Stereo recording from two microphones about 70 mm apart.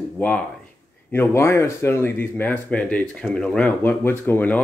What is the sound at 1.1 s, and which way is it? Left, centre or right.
Speech, left.